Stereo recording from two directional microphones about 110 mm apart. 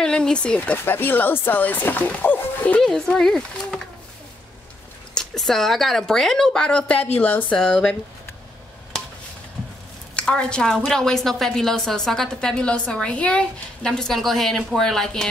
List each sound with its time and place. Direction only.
0.0 s speech: 5° left (ahead or behind)
2.8 s a woman's voice: 5° left (ahead or behind)
5.1 s a woman's voice: 5° left (ahead or behind)
10.1 s a woman's voice: 10° left (ahead or behind)